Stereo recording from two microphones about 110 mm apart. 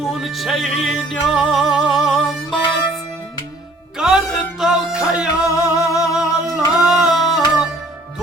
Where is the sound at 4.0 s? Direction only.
5° right (ahead or behind).